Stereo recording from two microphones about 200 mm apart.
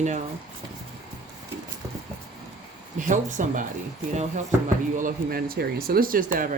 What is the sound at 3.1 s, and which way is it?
Speech, 40° right (ahead or behind).